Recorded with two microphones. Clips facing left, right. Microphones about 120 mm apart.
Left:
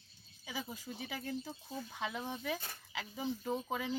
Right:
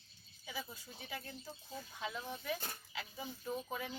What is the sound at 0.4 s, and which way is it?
Speech, 90° left.